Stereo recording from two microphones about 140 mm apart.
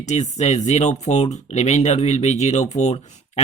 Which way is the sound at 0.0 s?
55° left (ahead or behind).